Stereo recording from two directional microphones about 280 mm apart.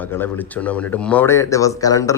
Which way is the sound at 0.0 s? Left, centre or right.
Centre.